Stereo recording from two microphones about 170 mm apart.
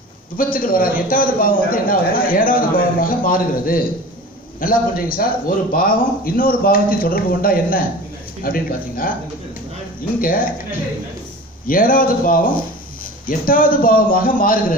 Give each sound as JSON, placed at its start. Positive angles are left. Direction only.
{"t": 0.4, "sound": "a man's voice", "side_deg": 55}
{"t": 10.2, "sound": "a man's voice", "side_deg": 55}
{"t": 11.6, "sound": "a man's voice", "side_deg": 55}